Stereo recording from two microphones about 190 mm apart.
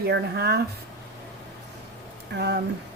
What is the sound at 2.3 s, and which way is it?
Speech, 60° right (ahead or behind).